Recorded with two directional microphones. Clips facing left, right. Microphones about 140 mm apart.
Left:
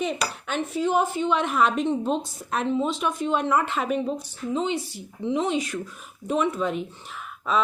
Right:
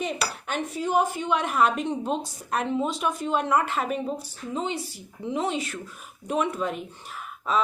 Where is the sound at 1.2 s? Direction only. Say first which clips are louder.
Left 2 dB; 45° right (ahead or behind).